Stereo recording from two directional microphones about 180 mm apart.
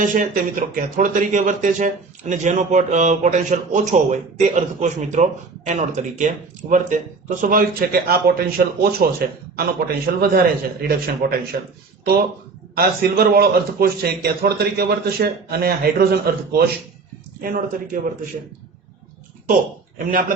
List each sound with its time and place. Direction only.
0.0 s a man's voice: 45° right (ahead or behind)
12.7 s a man's voice: 55° right (ahead or behind)
17.4 s speech: 50° right (ahead or behind)
20.1 s speech: 50° right (ahead or behind)